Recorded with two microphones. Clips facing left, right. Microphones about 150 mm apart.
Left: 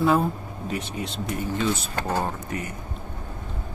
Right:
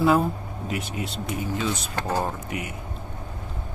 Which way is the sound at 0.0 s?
Centre (ahead or behind).